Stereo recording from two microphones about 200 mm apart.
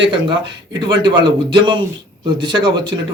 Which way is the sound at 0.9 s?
25° right (ahead or behind).